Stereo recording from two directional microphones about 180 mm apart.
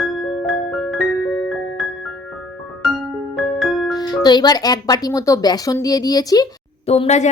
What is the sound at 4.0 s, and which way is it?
A woman's voice, 20° left (ahead or behind).